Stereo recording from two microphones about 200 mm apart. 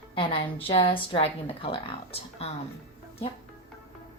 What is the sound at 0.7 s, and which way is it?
Speech, 25° left (ahead or behind).